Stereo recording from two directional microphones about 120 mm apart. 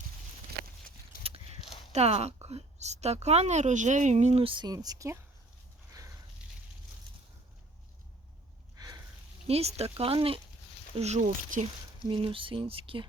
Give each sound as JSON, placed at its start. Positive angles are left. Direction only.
{"t": 1.2, "sound": "a sound", "side_deg": -55}
{"t": 1.6, "sound": "a sound", "side_deg": 55}
{"t": 1.9, "sound": "a woman's voice", "side_deg": -60}
{"t": 4.4, "sound": "speech", "side_deg": -40}
{"t": 9.5, "sound": "a woman's voice", "side_deg": -60}
{"t": 10.9, "sound": "speech", "side_deg": -65}
{"t": 12.0, "sound": "speech", "side_deg": -45}